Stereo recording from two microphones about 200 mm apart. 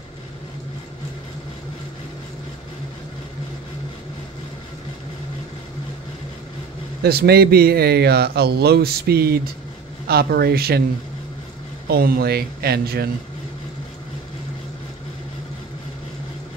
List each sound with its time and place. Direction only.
7.0 s speech: 50° right (ahead or behind)
11.9 s speech: 50° right (ahead or behind)